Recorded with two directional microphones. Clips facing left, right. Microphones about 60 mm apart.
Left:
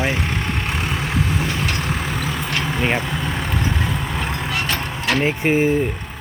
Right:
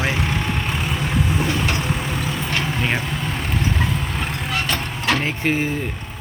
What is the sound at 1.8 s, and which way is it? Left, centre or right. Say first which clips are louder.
Vehicle: even; left.